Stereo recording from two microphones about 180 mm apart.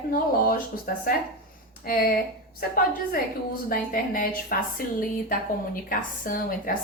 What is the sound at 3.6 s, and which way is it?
A woman's voice, 50° left (ahead or behind).